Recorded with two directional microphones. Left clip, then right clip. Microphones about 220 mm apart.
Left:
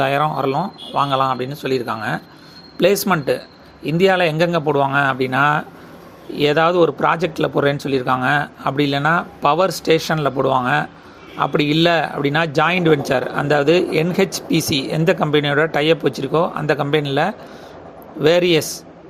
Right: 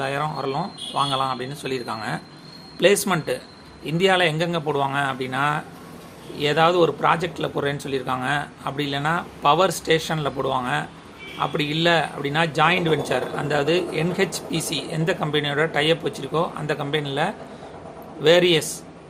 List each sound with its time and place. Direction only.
0.0 s speech: 35° left (ahead or behind)